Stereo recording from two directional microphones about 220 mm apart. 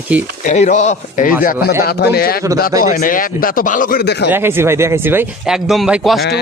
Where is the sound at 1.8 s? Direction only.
45° left (ahead or behind).